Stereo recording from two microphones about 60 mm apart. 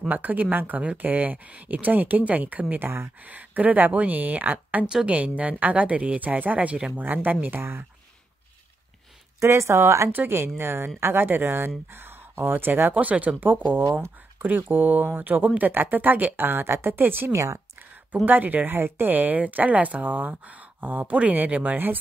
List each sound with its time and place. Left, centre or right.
0.1 s speech: right
2.7 s speech: right
3.2 s speech: right
9.4 s speech: right
10.1 s speech: right
17.3 s speech: right
17.7 s speech: right